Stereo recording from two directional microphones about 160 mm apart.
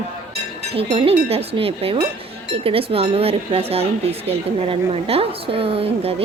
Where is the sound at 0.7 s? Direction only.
35° right (ahead or behind).